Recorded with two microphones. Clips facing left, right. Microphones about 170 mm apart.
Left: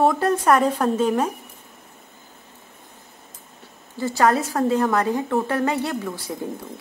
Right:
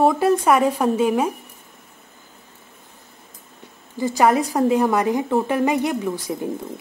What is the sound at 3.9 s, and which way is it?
A woman's voice, 15° right (ahead or behind).